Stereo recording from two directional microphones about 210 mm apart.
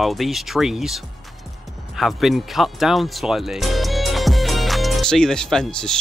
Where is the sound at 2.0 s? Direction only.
Centre (ahead or behind).